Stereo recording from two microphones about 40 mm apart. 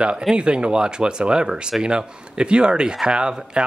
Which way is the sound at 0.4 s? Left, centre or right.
Right.